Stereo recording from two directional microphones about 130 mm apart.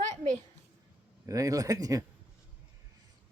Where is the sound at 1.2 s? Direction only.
25° right (ahead or behind).